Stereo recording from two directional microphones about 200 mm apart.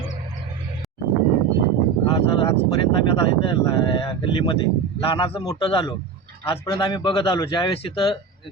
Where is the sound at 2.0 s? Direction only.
25° left (ahead or behind).